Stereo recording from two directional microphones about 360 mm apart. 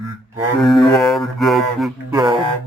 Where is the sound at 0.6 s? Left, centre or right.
Centre.